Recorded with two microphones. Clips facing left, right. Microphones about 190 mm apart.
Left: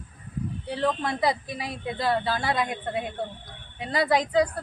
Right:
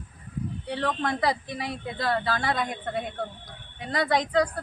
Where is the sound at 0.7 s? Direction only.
Centre (ahead or behind).